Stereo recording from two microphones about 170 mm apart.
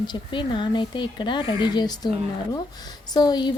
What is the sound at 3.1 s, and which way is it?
Speech, 25° left (ahead or behind).